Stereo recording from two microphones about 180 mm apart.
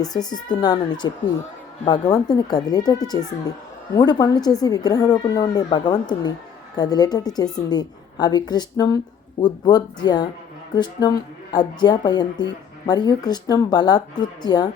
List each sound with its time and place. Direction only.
0.0 s speech: 20° left (ahead or behind)